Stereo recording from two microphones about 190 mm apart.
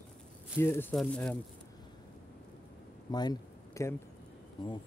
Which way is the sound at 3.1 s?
20° left (ahead or behind).